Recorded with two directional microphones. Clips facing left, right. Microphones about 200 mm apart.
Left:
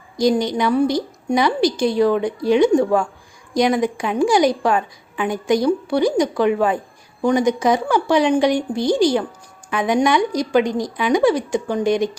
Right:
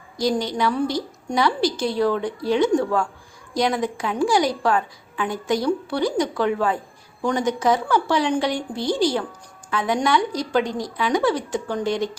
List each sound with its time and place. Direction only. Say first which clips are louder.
0.2 s a woman's voice: left 5 dB; 15° left (ahead or behind)